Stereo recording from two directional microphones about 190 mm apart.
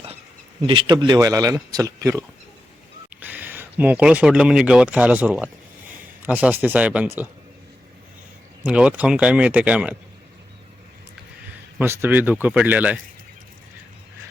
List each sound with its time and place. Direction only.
0.7 s a man's voice: 25° right (ahead or behind); by 7.3 s 10° right (ahead or behind)
8.6 s speech: 5° right (ahead or behind)
11.8 s speech: 10° right (ahead or behind)